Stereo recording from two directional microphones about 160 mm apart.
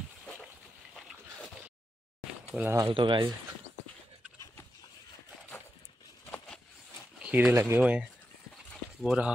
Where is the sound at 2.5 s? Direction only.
15° right (ahead or behind).